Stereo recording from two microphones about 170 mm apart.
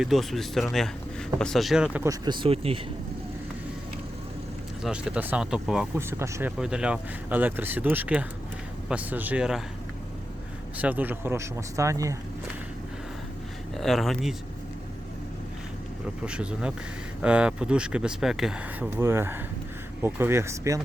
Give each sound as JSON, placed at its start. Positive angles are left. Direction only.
{"t": 0.0, "sound": "speech", "side_deg": 0}
{"t": 2.2, "sound": "speech", "side_deg": -30}
{"t": 4.8, "sound": "speech", "side_deg": -5}
{"t": 6.6, "sound": "speech", "side_deg": -5}
{"t": 10.8, "sound": "speech", "side_deg": -10}
{"t": 13.7, "sound": "speech", "side_deg": 0}
{"t": 16.2, "sound": "speech", "side_deg": -5}